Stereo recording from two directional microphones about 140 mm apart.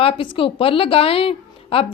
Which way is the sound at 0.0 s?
40° left (ahead or behind).